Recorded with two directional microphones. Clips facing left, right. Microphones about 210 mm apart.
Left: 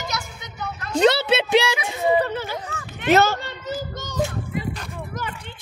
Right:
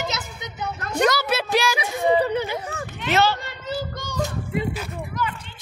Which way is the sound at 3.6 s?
20° left (ahead or behind).